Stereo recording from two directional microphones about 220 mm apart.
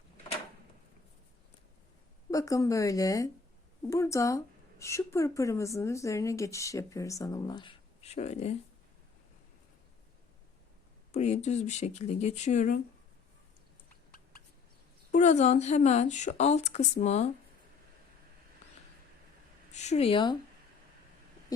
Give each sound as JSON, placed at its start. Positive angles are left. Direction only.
{"t": 2.3, "sound": "speech", "side_deg": 15}
{"t": 11.1, "sound": "a woman's voice", "side_deg": 30}
{"t": 13.9, "sound": "a sound", "side_deg": 40}
{"t": 15.1, "sound": "a woman's voice", "side_deg": 35}
{"t": 19.7, "sound": "speech", "side_deg": 30}